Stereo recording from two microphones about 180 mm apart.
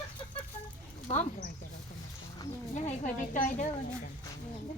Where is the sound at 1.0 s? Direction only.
40° left (ahead or behind).